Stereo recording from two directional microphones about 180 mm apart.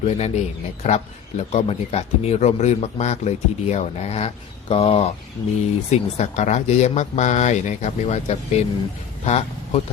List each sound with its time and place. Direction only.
0.0 s a man's voice: 40° left (ahead or behind)